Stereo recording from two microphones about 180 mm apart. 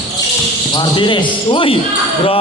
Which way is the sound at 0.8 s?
25° left (ahead or behind).